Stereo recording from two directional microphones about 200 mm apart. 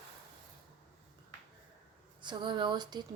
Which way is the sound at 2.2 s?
25° right (ahead or behind).